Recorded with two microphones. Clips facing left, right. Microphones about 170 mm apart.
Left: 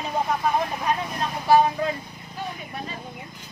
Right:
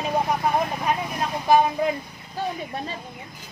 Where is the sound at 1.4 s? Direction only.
15° right (ahead or behind).